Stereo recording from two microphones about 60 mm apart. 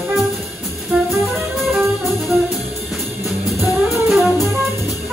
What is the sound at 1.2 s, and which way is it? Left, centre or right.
Music, centre.